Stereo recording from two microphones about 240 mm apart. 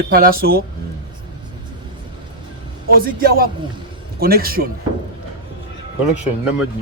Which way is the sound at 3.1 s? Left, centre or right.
Right.